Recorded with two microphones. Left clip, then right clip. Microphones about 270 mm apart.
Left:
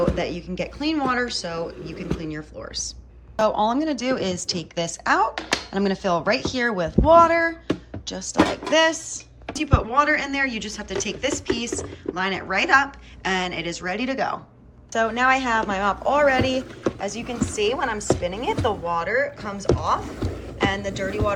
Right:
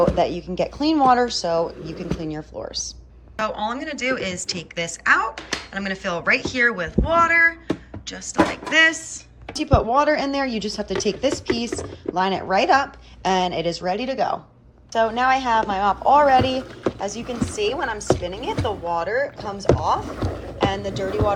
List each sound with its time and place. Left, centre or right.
0.0 s speech: centre
3.3 s a woman's voice: centre
9.6 s speech: centre